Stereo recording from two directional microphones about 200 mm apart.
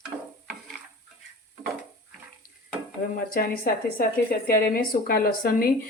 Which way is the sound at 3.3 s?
45° left (ahead or behind).